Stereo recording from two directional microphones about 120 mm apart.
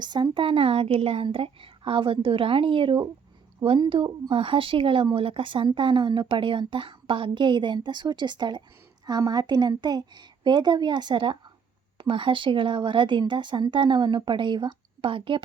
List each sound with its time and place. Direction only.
0.0 s speech: 40° right (ahead or behind)